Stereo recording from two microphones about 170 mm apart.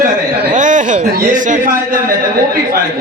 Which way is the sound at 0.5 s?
50° right (ahead or behind).